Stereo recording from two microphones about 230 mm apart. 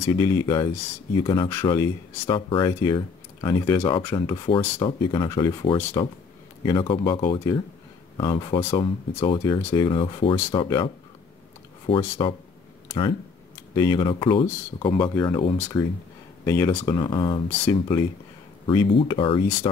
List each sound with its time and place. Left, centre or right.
0.0 s speech: centre
9.6 s speech: centre
9.8 s speech: left
11.9 s speech: left
13.7 s speech: centre
16.4 s speech: centre